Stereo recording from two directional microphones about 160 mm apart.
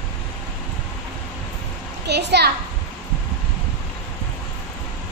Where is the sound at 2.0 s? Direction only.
90° right.